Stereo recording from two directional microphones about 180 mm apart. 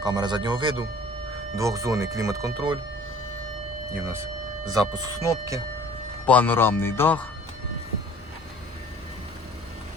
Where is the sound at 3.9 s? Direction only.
15° right (ahead or behind).